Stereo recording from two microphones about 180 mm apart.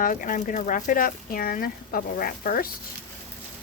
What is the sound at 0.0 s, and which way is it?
Speech, 50° left (ahead or behind).